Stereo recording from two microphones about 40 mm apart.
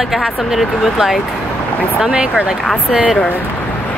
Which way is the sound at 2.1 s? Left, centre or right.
Right.